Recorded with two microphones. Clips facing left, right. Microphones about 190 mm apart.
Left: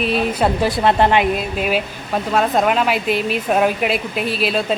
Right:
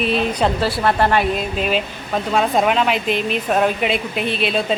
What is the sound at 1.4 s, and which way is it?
Speech, 5° left (ahead or behind).